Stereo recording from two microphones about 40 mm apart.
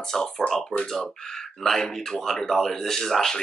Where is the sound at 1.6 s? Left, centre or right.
Centre.